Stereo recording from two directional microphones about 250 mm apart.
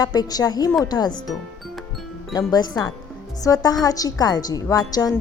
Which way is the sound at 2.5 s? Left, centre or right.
Centre.